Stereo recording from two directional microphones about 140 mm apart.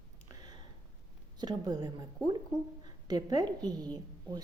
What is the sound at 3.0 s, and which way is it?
A woman's voice, 25° right (ahead or behind).